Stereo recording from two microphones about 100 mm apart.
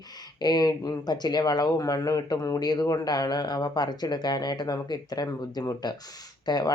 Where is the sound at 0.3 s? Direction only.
45° left (ahead or behind).